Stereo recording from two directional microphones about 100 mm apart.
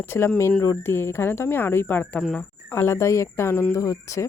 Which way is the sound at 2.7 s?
25° left (ahead or behind).